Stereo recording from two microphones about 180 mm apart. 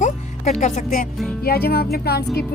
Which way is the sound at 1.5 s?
60° left (ahead or behind).